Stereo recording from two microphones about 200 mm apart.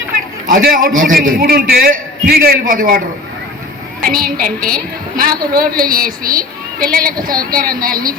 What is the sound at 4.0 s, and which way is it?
A woman's voice, 45° right (ahead or behind).